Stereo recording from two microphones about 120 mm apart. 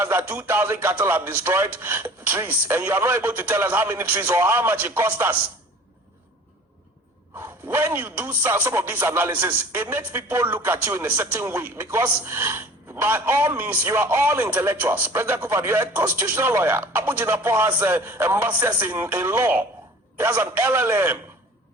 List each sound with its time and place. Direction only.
0.0 s speech: 20° right (ahead or behind)
7.3 s a man's voice: 20° right (ahead or behind)